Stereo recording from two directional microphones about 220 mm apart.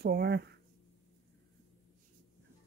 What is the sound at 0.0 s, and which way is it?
Speech, 45° right (ahead or behind).